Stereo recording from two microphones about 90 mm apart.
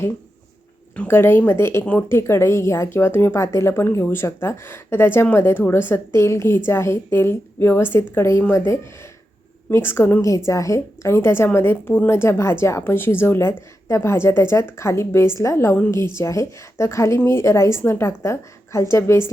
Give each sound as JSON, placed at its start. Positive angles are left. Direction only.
{"t": 1.0, "sound": "a woman's voice", "side_deg": 25}
{"t": 1.8, "sound": "a woman's voice", "side_deg": 15}